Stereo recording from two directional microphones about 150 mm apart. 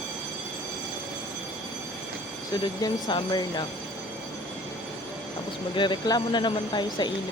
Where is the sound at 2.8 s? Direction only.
30° left (ahead or behind).